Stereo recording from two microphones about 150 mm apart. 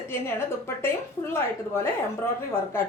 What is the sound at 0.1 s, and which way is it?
Speech, 15° left (ahead or behind).